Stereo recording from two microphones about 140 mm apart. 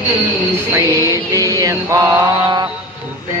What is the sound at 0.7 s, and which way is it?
Mantra, 20° right (ahead or behind).